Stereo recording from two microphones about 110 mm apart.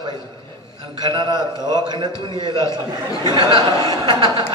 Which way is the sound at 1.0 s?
40° right (ahead or behind).